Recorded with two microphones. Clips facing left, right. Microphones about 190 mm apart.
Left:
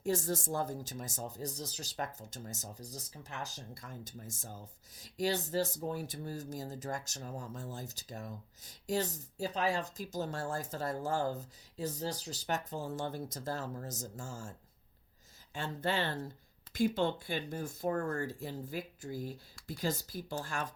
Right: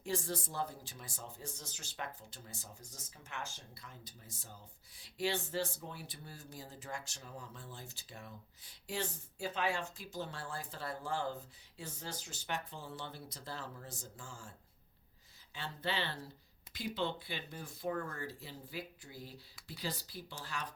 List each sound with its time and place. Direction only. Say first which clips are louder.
0.0 s speech: left 5 dB; 45° left (ahead or behind)
15.5 s speech: left 5 dB; 45° left (ahead or behind)